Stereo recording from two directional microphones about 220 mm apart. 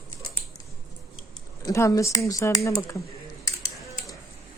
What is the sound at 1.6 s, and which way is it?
Speech, 15° left (ahead or behind).